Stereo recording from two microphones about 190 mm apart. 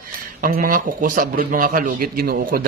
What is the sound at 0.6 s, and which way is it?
A man's voice, 45° right (ahead or behind).